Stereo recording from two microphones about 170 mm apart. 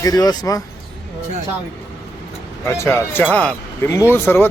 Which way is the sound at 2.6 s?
15° left (ahead or behind).